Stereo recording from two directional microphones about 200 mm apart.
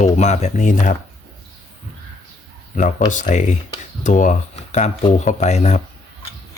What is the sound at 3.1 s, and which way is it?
Speech, 40° left (ahead or behind).